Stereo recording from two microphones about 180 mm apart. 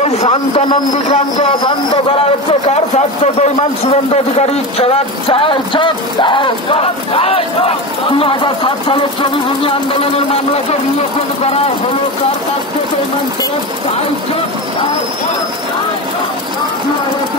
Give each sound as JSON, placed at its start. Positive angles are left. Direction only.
{"t": 0.0, "sound": "a man's voice", "side_deg": 35}
{"t": 1.6, "sound": "speech", "side_deg": 25}
{"t": 3.3, "sound": "a man's voice", "side_deg": 35}